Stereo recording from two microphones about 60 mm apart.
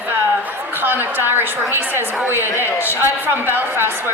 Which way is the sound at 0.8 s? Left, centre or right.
Right.